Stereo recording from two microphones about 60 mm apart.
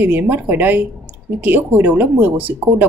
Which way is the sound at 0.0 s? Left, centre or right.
Right.